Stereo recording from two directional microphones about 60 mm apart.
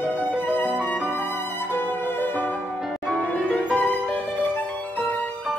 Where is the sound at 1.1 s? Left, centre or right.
Left.